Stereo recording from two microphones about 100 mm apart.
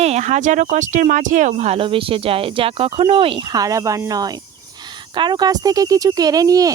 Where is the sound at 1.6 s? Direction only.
75° right (ahead or behind).